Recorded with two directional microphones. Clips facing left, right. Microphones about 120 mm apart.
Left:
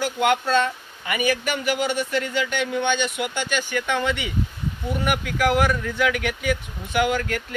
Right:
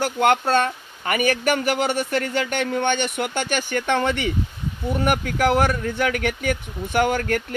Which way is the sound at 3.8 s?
40° right (ahead or behind).